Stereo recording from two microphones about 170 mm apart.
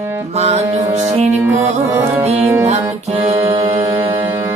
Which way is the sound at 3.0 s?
40° right (ahead or behind).